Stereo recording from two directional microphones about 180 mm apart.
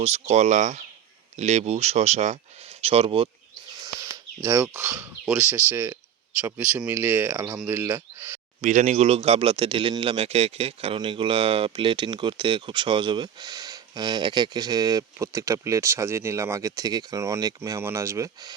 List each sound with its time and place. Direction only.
0.0 s speech: 35° right (ahead or behind)
3.8 s bird: 15° right (ahead or behind)
5.4 s speech: 10° right (ahead or behind)
8.6 s a man's voice: 40° right (ahead or behind); by 18.5 s 20° right (ahead or behind)